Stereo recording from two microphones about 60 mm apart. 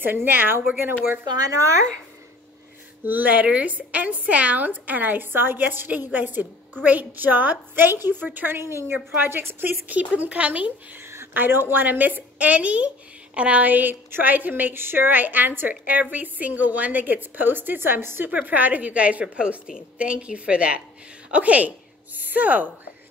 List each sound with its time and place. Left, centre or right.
0.0 s a woman's voice: right
1.3 s speech: right
3.1 s a woman's voice: right
8.5 s a woman's voice: right
8.9 s a woman's voice: right
11.0 s a sound: right
11.3 s a woman's voice: right